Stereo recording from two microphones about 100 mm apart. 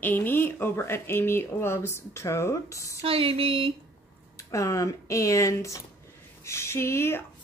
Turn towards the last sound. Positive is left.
turn(degrees=25)  # may be behind; listen again after turning